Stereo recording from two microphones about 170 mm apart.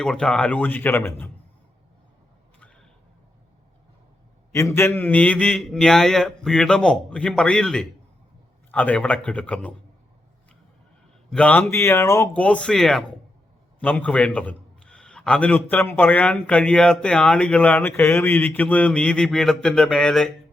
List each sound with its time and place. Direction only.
0.0 s speech: 5° left (ahead or behind)
4.5 s a man's voice: 15° left (ahead or behind)
11.3 s speech: 5° left (ahead or behind)
12.4 s a man's voice: 5° left (ahead or behind)